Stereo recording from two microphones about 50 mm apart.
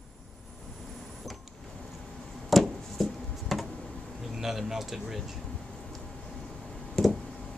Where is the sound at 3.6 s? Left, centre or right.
Left.